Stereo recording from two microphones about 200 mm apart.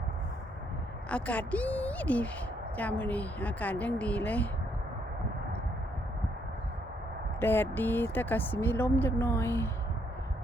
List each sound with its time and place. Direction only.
1.1 s speech: 5° left (ahead or behind)
7.3 s speech: 10° left (ahead or behind)